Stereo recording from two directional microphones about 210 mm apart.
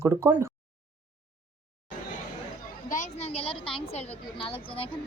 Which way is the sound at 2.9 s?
35° left (ahead or behind).